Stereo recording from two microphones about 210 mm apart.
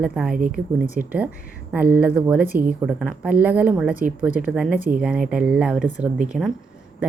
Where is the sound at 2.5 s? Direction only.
40° right (ahead or behind).